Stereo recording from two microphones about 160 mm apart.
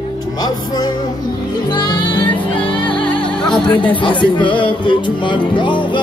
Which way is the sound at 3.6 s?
30° left (ahead or behind).